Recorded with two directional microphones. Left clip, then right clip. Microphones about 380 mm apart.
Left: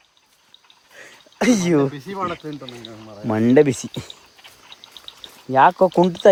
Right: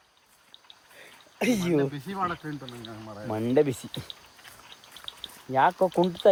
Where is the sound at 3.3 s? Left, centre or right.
Left.